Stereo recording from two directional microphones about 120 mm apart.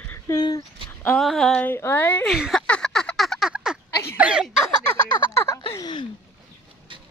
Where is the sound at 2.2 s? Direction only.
Centre (ahead or behind).